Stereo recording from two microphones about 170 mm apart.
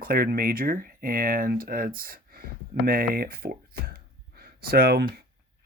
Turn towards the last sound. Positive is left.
turn(degrees=-65)  # may be behind; listen again after turning